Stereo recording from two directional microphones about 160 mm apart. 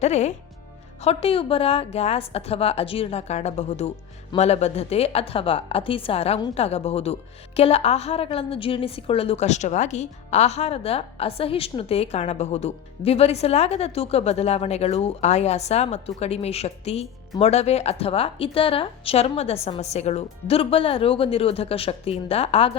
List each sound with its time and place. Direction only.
0.0 s a woman's voice: 45° left (ahead or behind)